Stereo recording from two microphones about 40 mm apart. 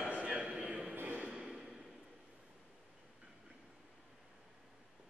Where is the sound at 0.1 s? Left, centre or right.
Right.